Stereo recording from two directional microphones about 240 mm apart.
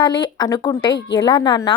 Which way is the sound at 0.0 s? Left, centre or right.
Centre.